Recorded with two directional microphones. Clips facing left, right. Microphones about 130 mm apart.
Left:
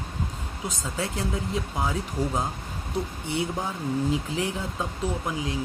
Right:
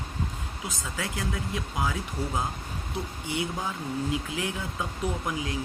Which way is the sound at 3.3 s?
30° left (ahead or behind).